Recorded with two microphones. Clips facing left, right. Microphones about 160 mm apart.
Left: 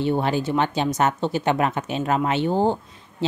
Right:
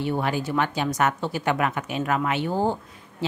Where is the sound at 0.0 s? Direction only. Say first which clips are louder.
Left 4 dB; 25° left (ahead or behind).